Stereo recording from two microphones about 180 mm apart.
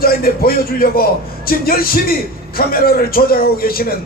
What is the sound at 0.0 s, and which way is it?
A man's voice, 55° left (ahead or behind).